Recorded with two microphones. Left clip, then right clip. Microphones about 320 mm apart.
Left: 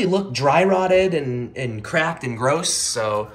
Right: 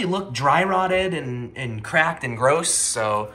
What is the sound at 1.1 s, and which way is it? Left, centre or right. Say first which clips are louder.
Speech: left 5 dB; right.